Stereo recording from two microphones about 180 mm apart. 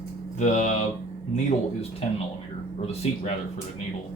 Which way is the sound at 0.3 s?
45° left (ahead or behind).